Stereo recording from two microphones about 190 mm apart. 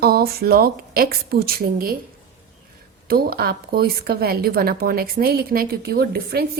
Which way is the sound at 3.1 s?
50° right (ahead or behind).